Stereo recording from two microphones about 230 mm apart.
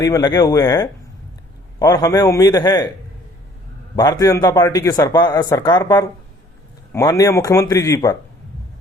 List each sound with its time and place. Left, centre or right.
0.0 s speech: centre
3.9 s speech: centre